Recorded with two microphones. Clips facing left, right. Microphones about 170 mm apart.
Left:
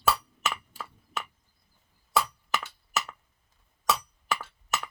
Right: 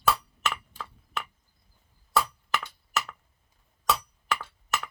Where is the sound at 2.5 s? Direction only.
5° left (ahead or behind).